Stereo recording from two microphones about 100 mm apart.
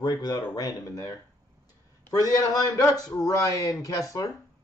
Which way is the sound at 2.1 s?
35° left (ahead or behind).